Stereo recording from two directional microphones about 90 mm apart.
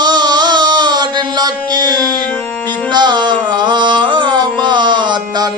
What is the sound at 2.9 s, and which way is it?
Carnatic music, 55° right (ahead or behind).